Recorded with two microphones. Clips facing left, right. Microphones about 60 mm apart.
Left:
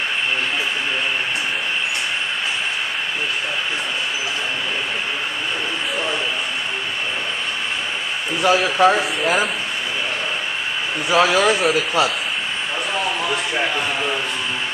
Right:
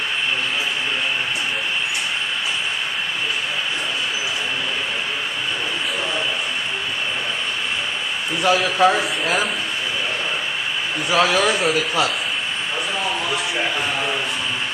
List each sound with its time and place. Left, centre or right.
8.4 s a man's voice: centre
11.1 s speech: centre
11.5 s a man's voice: centre